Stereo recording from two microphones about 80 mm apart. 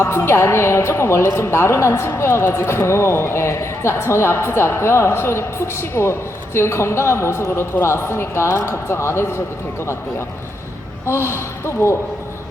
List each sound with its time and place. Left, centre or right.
0.0 s a woman's voice: left
11.0 s a woman's voice: left